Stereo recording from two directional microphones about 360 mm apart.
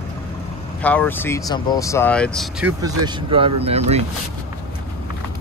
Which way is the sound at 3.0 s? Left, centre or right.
Centre.